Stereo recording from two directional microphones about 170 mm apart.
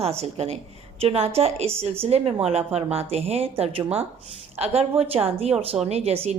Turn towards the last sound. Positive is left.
turn(degrees=-40)  # may be behind; listen again after turning